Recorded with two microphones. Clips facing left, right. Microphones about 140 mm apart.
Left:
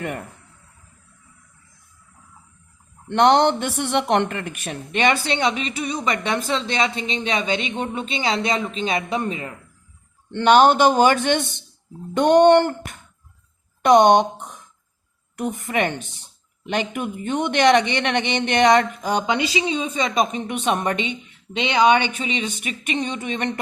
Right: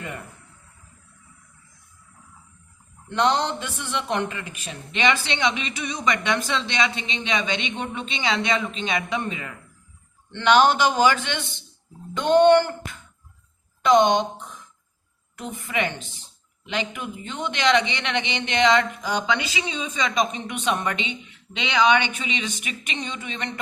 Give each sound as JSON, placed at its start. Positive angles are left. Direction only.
{"t": 0.0, "sound": "speech", "side_deg": 65}
{"t": 3.1, "sound": "a woman's voice", "side_deg": 65}
{"t": 10.3, "sound": "speech", "side_deg": 45}
{"t": 13.8, "sound": "speech", "side_deg": 60}
{"t": 15.4, "sound": "speech", "side_deg": 55}
{"t": 19.2, "sound": "a woman's voice", "side_deg": 30}